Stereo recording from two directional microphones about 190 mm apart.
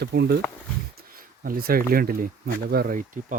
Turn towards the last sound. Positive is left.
turn(degrees=-45)  # may be behind; listen again after turning